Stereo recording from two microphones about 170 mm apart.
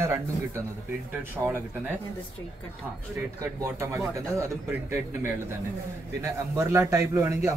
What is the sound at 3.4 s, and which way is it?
Speech, 15° right (ahead or behind).